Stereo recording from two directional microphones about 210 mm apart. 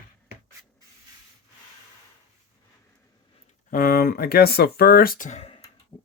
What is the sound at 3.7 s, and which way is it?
Speech, 45° left (ahead or behind).